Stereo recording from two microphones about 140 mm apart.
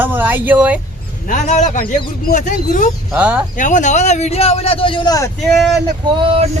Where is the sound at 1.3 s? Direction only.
60° left (ahead or behind).